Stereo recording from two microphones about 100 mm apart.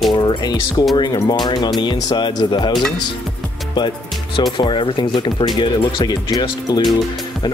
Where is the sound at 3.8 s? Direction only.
55° left (ahead or behind).